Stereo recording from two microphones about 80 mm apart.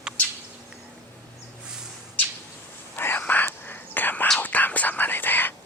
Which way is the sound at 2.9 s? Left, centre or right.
Left.